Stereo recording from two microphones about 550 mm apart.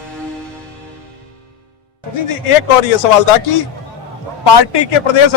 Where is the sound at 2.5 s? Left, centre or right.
Left.